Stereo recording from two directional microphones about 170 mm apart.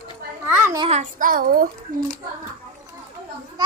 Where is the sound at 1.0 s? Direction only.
50° right (ahead or behind).